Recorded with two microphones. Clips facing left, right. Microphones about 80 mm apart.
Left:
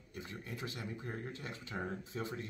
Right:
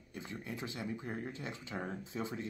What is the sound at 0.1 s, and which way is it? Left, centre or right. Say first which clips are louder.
Speech: right 2 dB; right.